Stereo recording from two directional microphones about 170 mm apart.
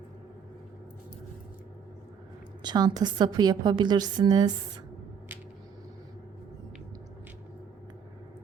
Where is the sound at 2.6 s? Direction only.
25° right (ahead or behind).